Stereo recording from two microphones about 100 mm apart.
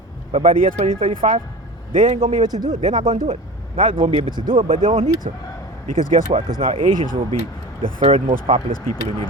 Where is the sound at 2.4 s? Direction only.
45° right (ahead or behind).